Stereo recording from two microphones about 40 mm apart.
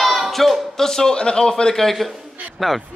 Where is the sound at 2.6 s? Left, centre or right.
Centre.